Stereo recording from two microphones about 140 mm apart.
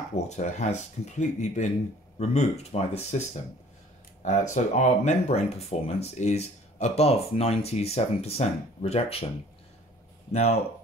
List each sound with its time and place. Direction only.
0.1 s speech: 55° left (ahead or behind)
4.2 s speech: 60° left (ahead or behind)
10.3 s speech: 50° left (ahead or behind)